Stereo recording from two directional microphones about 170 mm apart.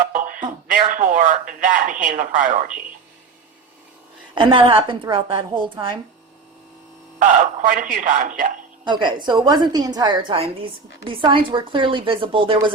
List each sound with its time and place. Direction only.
0.0 s speech: 55° right (ahead or behind)
4.4 s a woman's voice: 30° right (ahead or behind)
7.7 s speech: 50° right (ahead or behind)
8.8 s a woman's voice: 25° right (ahead or behind)